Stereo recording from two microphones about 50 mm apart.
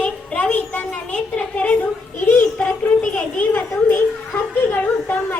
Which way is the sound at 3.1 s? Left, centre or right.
Left.